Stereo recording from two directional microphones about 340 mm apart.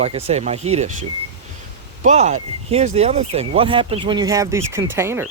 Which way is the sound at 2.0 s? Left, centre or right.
Centre.